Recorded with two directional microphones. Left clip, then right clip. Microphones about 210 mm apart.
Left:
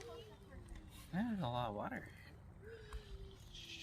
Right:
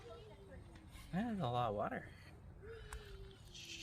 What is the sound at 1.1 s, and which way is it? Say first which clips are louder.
Speech: right 2 dB; 40° right (ahead or behind).